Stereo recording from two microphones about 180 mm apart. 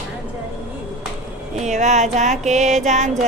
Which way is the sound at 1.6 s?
40° right (ahead or behind).